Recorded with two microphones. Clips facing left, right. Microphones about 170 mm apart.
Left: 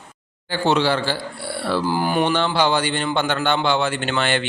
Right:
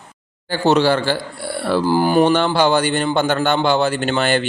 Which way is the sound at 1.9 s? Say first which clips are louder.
Right 7 dB; 35° right (ahead or behind).